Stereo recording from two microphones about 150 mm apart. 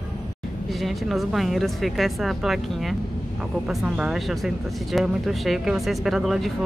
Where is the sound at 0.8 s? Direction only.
Centre (ahead or behind).